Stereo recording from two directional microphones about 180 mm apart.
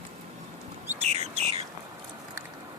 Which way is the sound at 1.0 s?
35° right (ahead or behind).